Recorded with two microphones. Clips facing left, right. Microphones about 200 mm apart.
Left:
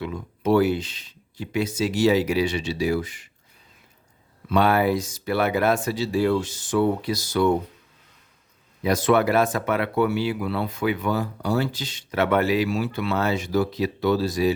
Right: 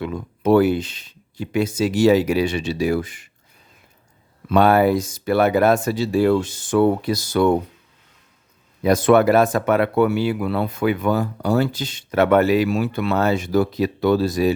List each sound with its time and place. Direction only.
0.0 s speech: 55° right (ahead or behind)
4.4 s speech: 50° right (ahead or behind)
8.8 s speech: 50° right (ahead or behind)